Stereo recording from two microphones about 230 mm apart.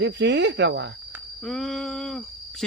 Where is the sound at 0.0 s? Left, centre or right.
Right.